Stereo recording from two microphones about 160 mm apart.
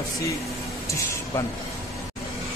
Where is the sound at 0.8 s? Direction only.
20° left (ahead or behind).